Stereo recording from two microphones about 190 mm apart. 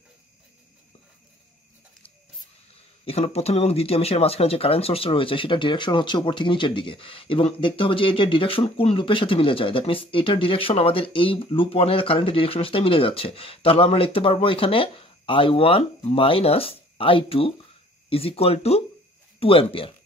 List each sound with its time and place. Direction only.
2.7 s speech: 30° left (ahead or behind)